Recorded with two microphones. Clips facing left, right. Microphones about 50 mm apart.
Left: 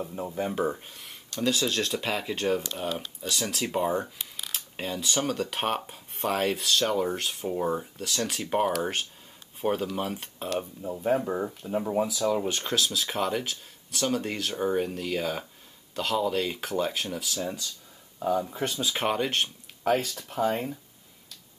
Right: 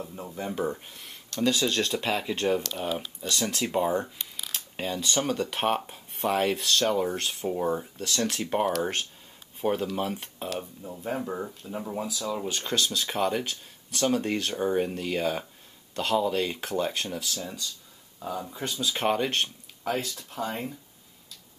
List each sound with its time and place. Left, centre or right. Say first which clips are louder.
0.0 s speech: left 4 dB; centre
10.6 s speech: left 6 dB; centre
12.4 s speech: left 1 dB; centre
18.9 s speech: right 3 dB; centre
19.8 s speech: left 4 dB; centre